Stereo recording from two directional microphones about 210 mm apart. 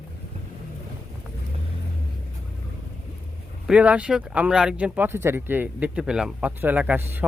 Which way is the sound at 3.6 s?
5° right (ahead or behind).